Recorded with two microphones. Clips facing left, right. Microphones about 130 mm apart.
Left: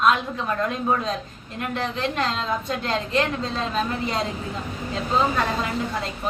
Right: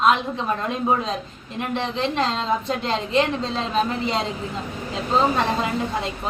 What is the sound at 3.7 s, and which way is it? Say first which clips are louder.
Speech: right 5 dB; 25° right (ahead or behind).